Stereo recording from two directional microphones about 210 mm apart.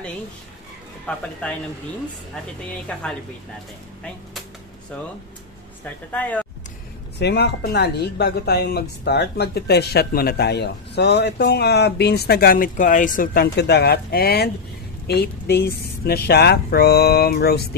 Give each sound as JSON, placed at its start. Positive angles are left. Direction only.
{"t": 1.1, "sound": "speech", "side_deg": 5}
{"t": 2.9, "sound": "speech", "side_deg": 5}
{"t": 6.1, "sound": "speech", "side_deg": 10}
{"t": 7.2, "sound": "speech", "side_deg": 55}